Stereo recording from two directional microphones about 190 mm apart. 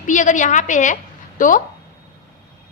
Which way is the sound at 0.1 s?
40° left (ahead or behind).